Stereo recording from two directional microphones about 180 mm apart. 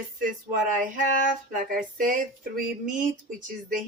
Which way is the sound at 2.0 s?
45° right (ahead or behind).